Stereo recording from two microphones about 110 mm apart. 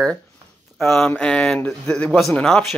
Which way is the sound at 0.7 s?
5° left (ahead or behind).